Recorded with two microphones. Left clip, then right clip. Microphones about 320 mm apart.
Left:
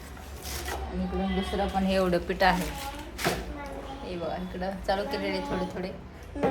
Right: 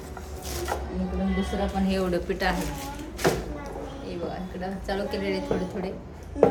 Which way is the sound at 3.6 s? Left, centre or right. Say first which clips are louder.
Right 2 dB; centre.